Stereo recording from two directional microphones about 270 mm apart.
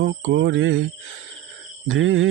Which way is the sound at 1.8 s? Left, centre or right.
Right.